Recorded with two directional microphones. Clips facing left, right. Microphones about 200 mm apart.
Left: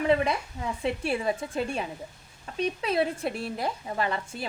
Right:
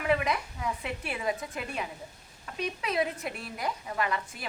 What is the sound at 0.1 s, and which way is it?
Speech, 30° left (ahead or behind).